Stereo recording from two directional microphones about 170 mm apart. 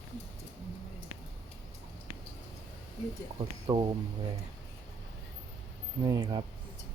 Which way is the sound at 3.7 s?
30° right (ahead or behind).